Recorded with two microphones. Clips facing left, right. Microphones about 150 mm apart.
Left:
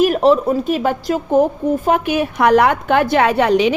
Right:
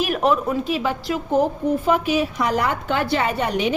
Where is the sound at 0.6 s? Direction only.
50° left (ahead or behind).